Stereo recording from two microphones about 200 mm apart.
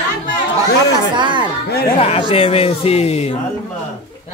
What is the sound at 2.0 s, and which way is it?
Speech, 30° left (ahead or behind).